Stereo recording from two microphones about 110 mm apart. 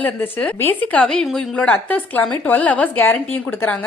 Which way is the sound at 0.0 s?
15° left (ahead or behind).